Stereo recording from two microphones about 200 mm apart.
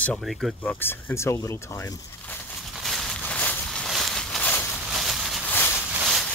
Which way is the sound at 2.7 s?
Centre (ahead or behind).